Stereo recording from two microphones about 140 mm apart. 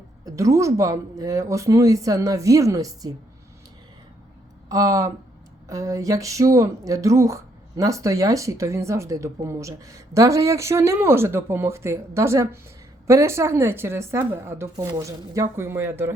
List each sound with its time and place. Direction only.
0.3 s speech: 25° right (ahead or behind)
4.7 s speech: 25° right (ahead or behind)